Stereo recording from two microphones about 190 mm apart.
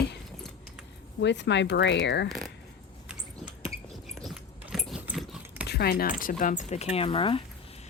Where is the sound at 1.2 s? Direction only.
65° left (ahead or behind).